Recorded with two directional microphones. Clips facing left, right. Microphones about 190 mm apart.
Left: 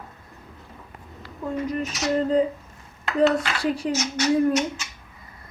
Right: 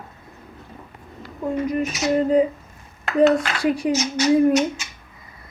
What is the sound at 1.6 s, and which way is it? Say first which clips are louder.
Speech: right 4 dB; 10° right (ahead or behind).